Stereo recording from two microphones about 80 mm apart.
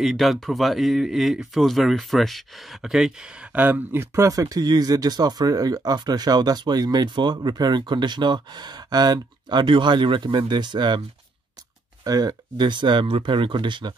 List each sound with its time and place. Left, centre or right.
0.0 s speech: centre
3.5 s speech: right
12.0 s speech: right